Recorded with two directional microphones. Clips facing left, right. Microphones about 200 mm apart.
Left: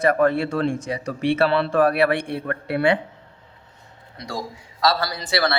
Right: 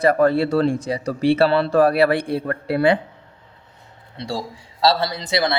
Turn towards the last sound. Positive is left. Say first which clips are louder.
# right 2 dB
turn(degrees=-20)  # may be behind; listen again after turning